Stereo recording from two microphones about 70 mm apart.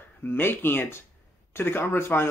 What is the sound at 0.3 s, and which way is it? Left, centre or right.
Speech, left.